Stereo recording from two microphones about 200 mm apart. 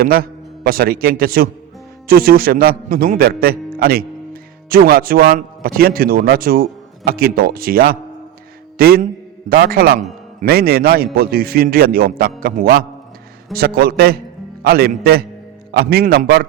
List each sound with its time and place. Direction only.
0.0 s a man's voice: 50° right (ahead or behind)